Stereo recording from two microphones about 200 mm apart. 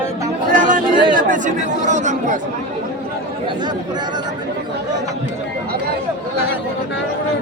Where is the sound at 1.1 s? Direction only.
40° right (ahead or behind).